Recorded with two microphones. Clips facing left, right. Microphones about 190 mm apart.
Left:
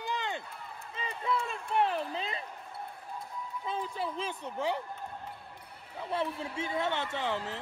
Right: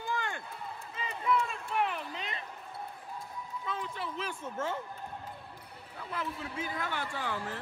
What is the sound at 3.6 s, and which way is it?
A man's voice, 30° left (ahead or behind).